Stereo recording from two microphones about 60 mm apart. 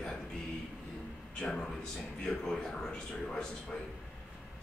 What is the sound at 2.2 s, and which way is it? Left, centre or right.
Speech, centre.